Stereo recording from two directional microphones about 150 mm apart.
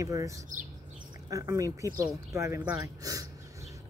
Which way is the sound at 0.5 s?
60° right (ahead or behind).